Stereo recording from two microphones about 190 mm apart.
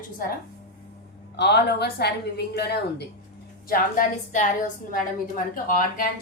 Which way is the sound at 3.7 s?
45° left (ahead or behind).